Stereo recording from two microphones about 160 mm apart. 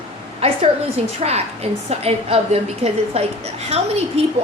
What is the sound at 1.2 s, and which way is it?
A woman's voice, 40° right (ahead or behind).